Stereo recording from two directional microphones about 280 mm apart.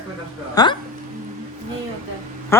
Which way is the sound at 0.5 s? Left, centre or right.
Centre.